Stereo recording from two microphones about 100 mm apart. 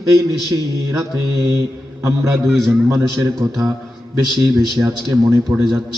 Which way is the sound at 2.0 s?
30° right (ahead or behind).